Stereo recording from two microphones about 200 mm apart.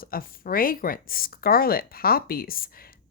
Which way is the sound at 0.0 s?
45° left (ahead or behind).